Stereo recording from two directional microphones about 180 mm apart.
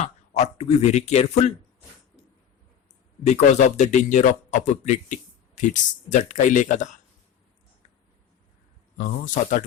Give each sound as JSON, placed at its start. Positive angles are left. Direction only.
{"t": 0.0, "sound": "speech", "side_deg": 40}
{"t": 3.2, "sound": "speech", "side_deg": 40}
{"t": 9.0, "sound": "speech", "side_deg": 50}